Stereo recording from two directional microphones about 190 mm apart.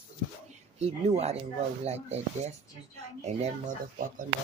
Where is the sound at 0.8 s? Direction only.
35° right (ahead or behind).